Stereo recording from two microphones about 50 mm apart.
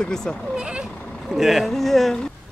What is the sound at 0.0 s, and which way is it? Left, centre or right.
Speech, centre.